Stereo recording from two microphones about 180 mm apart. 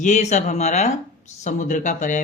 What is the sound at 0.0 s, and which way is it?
Speech, 40° left (ahead or behind).